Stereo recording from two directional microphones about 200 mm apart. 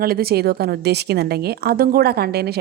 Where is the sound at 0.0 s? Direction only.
50° right (ahead or behind).